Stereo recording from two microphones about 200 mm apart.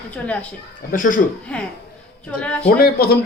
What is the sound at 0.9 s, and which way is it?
Speech, 40° left (ahead or behind).